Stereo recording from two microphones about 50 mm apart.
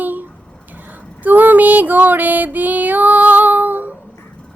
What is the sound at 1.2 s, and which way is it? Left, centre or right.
Female singing, right.